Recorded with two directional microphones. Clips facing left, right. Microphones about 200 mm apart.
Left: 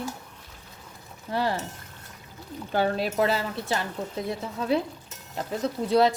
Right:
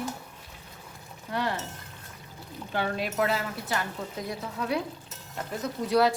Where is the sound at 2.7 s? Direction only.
35° left (ahead or behind).